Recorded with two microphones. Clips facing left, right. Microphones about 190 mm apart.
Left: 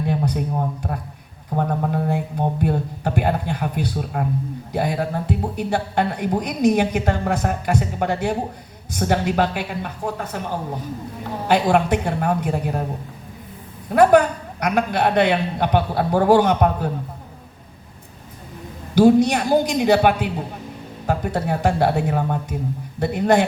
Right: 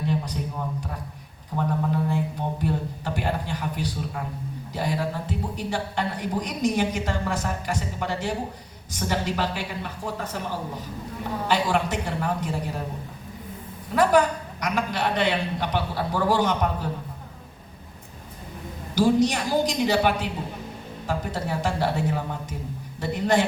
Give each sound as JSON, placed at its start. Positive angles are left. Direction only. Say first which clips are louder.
{"t": 0.1, "sound": "a woman's voice", "louder": "left 6 dB", "side_deg": 55}
{"t": 11.4, "sound": "a woman's voice", "louder": "left 7 dB", "side_deg": 60}
{"t": 13.9, "sound": "a woman's voice", "louder": "left 6 dB", "side_deg": 60}
{"t": 18.9, "sound": "a woman's voice", "louder": "left 6 dB", "side_deg": 60}